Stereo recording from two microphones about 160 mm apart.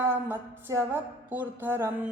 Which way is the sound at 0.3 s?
15° right (ahead or behind).